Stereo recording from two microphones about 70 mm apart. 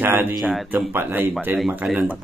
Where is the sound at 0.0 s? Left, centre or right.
Right.